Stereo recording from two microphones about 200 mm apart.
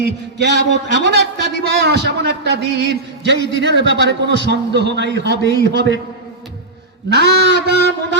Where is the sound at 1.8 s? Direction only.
60° right (ahead or behind).